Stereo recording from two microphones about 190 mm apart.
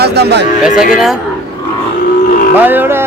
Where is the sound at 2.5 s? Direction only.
10° right (ahead or behind).